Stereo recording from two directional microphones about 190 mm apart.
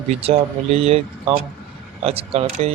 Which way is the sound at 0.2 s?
30° right (ahead or behind).